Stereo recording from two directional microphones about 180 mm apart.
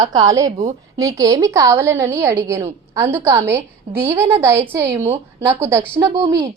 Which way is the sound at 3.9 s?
25° right (ahead or behind).